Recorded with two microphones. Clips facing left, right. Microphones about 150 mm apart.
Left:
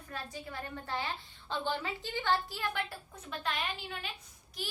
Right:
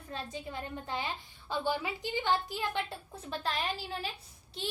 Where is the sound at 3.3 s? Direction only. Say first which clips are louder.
Right 2 dB; 35° right (ahead or behind).